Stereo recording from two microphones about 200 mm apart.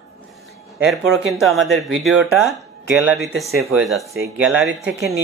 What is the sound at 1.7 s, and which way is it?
A man's voice, centre (ahead or behind).